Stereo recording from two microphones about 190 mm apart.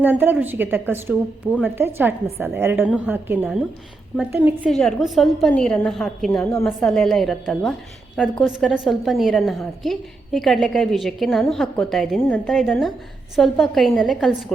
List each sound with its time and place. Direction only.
0.0 s a woman's voice: 10° right (ahead or behind)